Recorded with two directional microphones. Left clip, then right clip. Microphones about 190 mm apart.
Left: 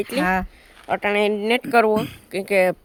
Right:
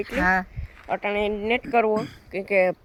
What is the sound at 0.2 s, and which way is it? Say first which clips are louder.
Speech: right 1 dB; 25° left (ahead or behind).